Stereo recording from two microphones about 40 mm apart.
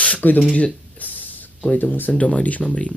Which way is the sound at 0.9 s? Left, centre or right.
Left.